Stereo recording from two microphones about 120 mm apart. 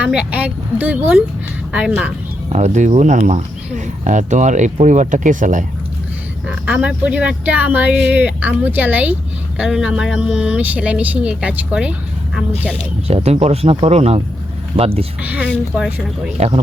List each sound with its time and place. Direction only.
0.0 s speech: 10° right (ahead or behind)
2.5 s speech: 70° right (ahead or behind); by 5.6 s 90° right
6.7 s speech: 10° right (ahead or behind)
13.1 s speech: 60° right (ahead or behind)
15.2 s speech: 15° right (ahead or behind)